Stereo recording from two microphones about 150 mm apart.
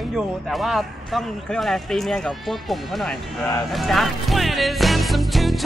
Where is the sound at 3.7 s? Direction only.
Centre (ahead or behind).